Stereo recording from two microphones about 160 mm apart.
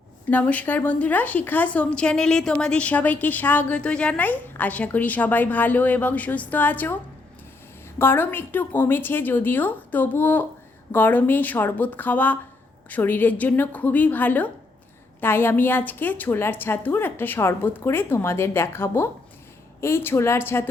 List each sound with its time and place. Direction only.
0.3 s a woman's voice: 10° left (ahead or behind)